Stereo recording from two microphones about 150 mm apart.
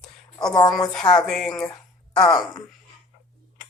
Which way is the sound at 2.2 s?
30° left (ahead or behind).